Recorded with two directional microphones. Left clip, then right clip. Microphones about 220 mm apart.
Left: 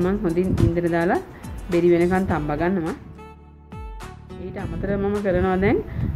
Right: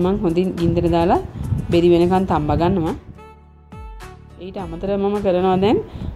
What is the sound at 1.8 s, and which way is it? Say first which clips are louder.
A woman's voice: right 4 dB; 20° right (ahead or behind).